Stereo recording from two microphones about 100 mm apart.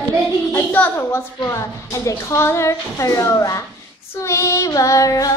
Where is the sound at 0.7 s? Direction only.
20° left (ahead or behind).